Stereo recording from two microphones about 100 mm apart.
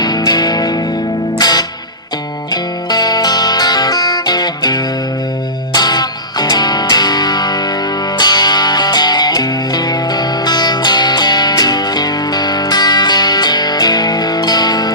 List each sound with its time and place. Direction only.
0.3 s music: 40° left (ahead or behind)